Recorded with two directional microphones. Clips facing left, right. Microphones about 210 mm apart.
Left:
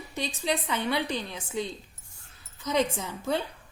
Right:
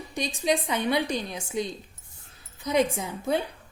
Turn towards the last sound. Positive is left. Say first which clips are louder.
# right 2 dB
turn(degrees=-15)  # may be behind; listen again after turning